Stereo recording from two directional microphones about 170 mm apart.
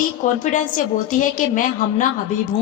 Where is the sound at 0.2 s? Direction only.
50° left (ahead or behind).